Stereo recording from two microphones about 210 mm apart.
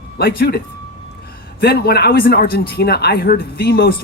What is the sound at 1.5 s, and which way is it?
Speech, 45° left (ahead or behind).